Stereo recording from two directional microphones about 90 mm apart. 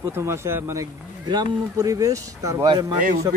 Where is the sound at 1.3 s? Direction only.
45° right (ahead or behind).